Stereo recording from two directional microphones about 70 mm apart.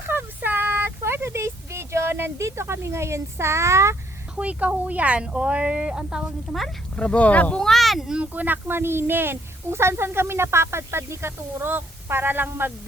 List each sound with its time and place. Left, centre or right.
0.0 s a sound: right
2.5 s speech: right
4.4 s speech: centre
6.9 s speech: centre
7.6 s speech: centre
8.2 s speech: right